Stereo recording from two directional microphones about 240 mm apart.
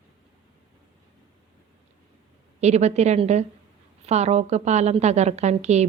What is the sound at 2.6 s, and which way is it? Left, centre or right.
A woman's voice, right.